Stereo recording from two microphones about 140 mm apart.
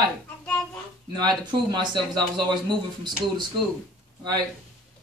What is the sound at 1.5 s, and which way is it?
Speech, 35° right (ahead or behind).